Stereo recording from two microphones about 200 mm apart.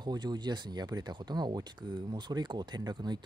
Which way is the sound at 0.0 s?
20° right (ahead or behind).